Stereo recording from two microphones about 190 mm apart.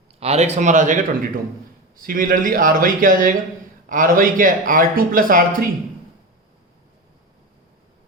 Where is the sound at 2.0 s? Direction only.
45° right (ahead or behind).